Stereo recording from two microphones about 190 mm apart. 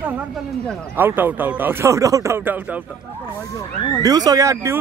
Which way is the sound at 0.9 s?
10° right (ahead or behind).